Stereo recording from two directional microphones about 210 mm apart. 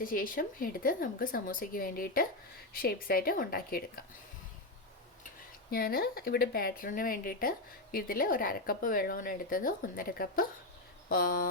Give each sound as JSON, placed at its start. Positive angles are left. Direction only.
{"t": 0.0, "sound": "speech", "side_deg": 40}
{"t": 5.7, "sound": "speech", "side_deg": 45}